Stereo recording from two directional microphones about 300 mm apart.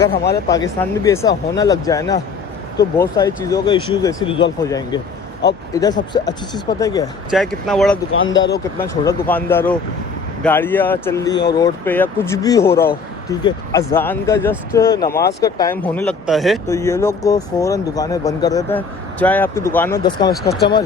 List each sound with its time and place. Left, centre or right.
0.4 s speech: centre
5.7 s speech: centre
7.3 s speech: centre
8.1 s speech: left
8.5 s speech: centre